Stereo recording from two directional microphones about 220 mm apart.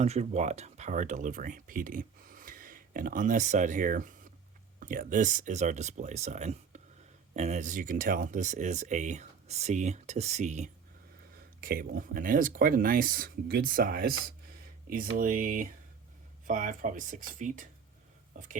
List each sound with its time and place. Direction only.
0.0 s speech: 30° right (ahead or behind)